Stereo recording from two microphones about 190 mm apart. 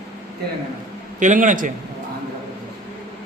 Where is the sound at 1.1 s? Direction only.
40° right (ahead or behind).